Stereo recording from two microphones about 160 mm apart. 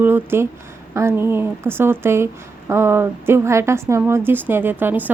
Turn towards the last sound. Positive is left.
turn(degrees=-10)  # may be behind; listen again after turning